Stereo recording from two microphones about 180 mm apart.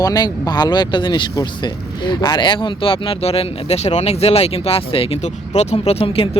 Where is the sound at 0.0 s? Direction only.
20° left (ahead or behind).